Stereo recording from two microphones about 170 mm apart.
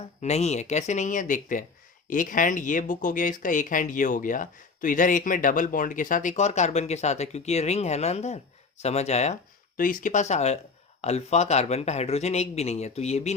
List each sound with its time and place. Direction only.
0.2 s speech: 40° left (ahead or behind)